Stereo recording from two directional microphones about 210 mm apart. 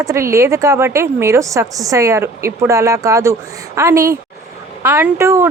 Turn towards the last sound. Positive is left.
turn(degrees=-10)  # may be behind; listen again after turning